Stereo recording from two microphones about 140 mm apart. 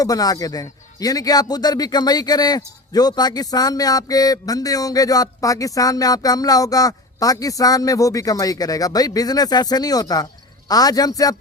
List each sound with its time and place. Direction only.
0.0 s a man's voice: 25° left (ahead or behind)